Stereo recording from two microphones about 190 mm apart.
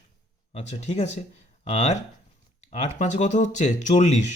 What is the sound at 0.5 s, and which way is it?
Speech, 35° left (ahead or behind).